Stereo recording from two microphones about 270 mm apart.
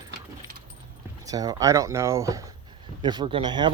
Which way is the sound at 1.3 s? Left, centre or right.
Centre.